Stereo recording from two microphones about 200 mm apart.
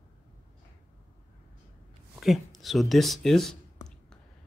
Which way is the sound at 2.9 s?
Centre (ahead or behind).